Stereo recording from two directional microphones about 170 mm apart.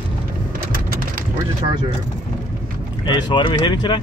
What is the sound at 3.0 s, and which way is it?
Speech, 25° left (ahead or behind).